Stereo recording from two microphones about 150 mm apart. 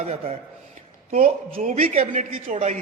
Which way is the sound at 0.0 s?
45° right (ahead or behind).